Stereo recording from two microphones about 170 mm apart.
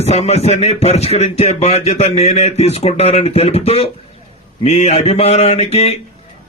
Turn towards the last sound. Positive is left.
turn(degrees=35)  # may be behind; listen again after turning